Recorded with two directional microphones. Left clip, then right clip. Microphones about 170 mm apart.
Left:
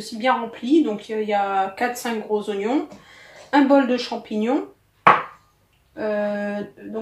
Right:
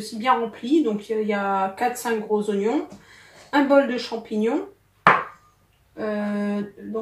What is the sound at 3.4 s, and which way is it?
Speech, 30° left (ahead or behind).